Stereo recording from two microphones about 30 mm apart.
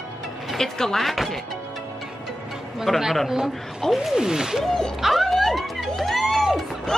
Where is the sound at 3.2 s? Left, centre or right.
Centre.